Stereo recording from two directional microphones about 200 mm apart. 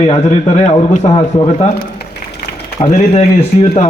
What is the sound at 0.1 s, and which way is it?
A man's voice, 30° left (ahead or behind).